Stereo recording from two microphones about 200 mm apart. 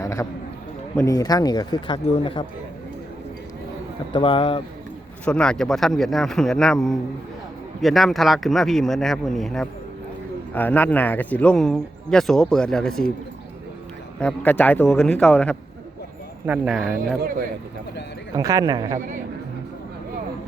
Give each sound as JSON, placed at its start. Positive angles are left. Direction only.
{"t": 0.0, "sound": "a sound", "side_deg": 15}
{"t": 0.9, "sound": "a man's voice", "side_deg": 15}
{"t": 4.1, "sound": "a man's voice", "side_deg": 25}
{"t": 5.2, "sound": "a man's voice", "side_deg": 5}
{"t": 14.2, "sound": "a man's voice", "side_deg": 5}
{"t": 17.2, "sound": "speech", "side_deg": -45}
{"t": 18.3, "sound": "a man's voice", "side_deg": -20}